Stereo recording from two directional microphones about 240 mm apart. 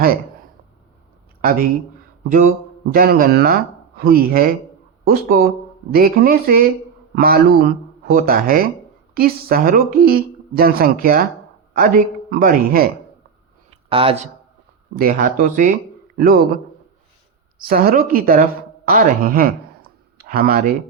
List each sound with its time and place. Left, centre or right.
1.4 s speech: right
2.9 s a man's voice: right
13.7 s a sound: right
14.9 s speech: right
17.7 s speech: right